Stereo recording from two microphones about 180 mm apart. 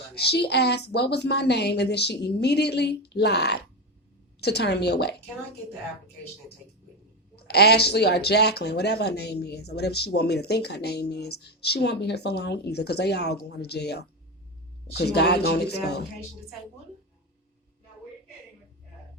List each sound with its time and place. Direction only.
0.1 s a woman's voice: 65° left (ahead or behind)
7.3 s speech: 65° left (ahead or behind)